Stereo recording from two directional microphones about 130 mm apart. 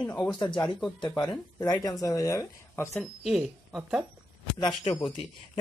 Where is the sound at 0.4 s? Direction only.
35° left (ahead or behind); by 3.0 s 20° left (ahead or behind).